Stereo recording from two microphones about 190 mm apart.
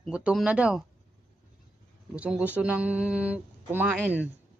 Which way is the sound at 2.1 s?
5° right (ahead or behind).